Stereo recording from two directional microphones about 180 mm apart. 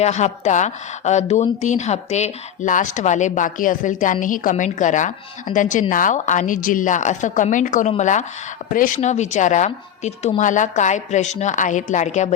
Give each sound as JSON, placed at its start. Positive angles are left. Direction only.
{"t": 0.0, "sound": "a woman's voice", "side_deg": 40}